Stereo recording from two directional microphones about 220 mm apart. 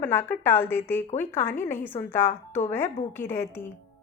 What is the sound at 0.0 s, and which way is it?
A woman's voice, 10° left (ahead or behind).